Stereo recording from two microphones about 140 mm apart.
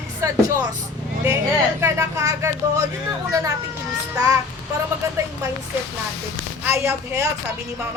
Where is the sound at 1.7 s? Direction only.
20° right (ahead or behind).